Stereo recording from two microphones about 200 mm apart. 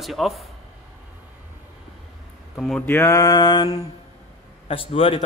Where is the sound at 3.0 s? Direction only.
15° left (ahead or behind).